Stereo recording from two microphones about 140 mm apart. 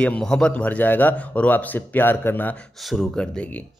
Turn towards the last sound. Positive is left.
turn(degrees=0)  # may be behind; listen again after turning